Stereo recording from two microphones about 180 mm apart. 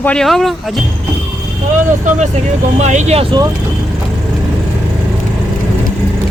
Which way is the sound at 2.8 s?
40° right (ahead or behind).